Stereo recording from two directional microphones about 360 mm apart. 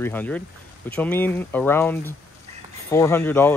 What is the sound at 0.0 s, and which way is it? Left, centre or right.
Speech, centre.